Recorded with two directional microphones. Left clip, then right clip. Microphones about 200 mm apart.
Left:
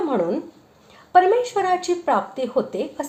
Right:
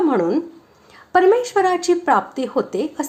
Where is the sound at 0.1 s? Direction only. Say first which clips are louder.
Right 4 dB; 25° right (ahead or behind).